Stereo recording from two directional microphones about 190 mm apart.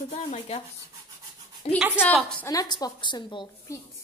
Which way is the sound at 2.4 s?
20° left (ahead or behind).